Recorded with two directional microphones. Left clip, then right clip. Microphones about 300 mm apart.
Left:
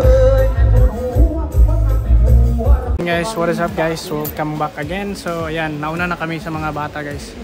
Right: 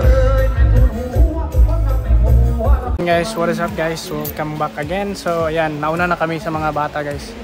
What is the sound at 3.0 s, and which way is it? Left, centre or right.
Speech, centre.